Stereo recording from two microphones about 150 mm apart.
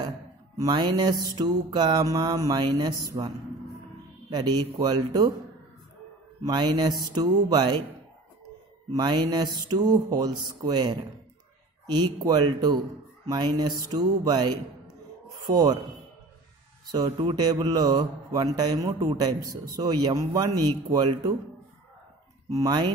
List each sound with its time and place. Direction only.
0.6 s speech: 25° right (ahead or behind)
6.4 s speech: 30° right (ahead or behind)
8.9 s speech: 30° right (ahead or behind)
16.9 s speech: 30° right (ahead or behind)
22.5 s speech: 25° right (ahead or behind)